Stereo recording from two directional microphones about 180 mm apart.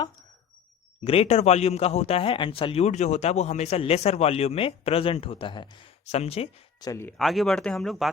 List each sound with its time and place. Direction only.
1.0 s a man's voice: 30° left (ahead or behind)
6.7 s speech: 20° left (ahead or behind)
7.2 s speech: centre (ahead or behind)